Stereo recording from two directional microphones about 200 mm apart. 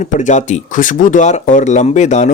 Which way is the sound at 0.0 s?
35° left (ahead or behind).